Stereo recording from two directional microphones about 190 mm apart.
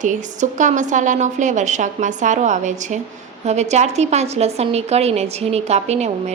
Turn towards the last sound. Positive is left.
turn(degrees=-35)  # may be behind; listen again after turning